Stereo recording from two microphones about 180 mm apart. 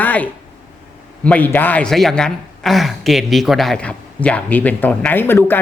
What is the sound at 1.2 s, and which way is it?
A man's voice, 10° left (ahead or behind).